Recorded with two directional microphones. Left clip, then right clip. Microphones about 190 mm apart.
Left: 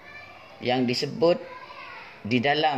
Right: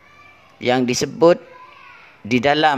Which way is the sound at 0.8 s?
25° right (ahead or behind).